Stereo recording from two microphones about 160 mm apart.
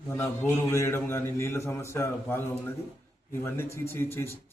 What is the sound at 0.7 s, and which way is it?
A man's voice, 15° left (ahead or behind).